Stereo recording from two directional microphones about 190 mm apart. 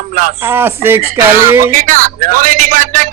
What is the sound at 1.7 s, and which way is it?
Speech, 45° right (ahead or behind).